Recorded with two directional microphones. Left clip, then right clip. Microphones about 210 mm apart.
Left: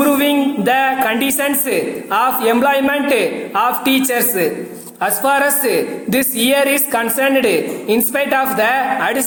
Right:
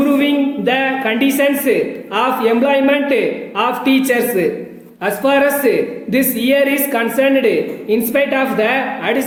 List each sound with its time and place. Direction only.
0.0 s a woman's voice: 15° left (ahead or behind)